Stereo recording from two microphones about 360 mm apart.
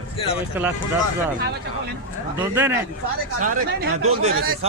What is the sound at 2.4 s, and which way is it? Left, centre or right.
Speech, centre.